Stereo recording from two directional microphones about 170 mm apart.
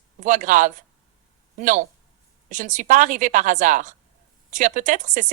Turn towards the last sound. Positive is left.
turn(degrees=-50)  # may be behind; listen again after turning